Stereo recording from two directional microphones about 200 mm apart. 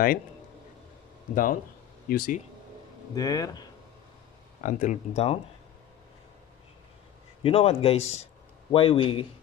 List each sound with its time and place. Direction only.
1.3 s speech: 45° left (ahead or behind)
3.2 s a man's voice: 20° left (ahead or behind)
4.6 s speech: 35° left (ahead or behind)
7.4 s a man's voice: 30° left (ahead or behind)